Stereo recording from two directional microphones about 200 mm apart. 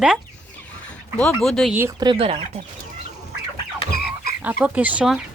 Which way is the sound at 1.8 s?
20° right (ahead or behind).